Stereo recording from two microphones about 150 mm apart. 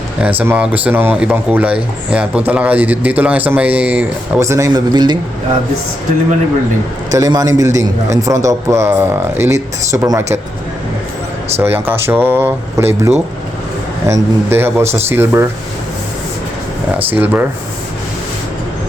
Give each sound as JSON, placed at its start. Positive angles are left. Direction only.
{"t": 0.2, "sound": "speech", "side_deg": -10}
{"t": 7.1, "sound": "speech", "side_deg": -25}
{"t": 11.6, "sound": "speech", "side_deg": -15}
{"t": 17.1, "sound": "speech", "side_deg": -10}